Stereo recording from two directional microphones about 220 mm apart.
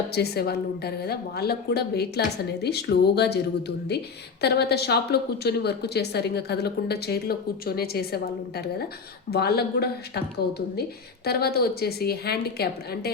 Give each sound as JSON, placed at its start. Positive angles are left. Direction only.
{"t": 0.1, "sound": "a woman's voice", "side_deg": 45}
{"t": 11.3, "sound": "a woman's voice", "side_deg": 45}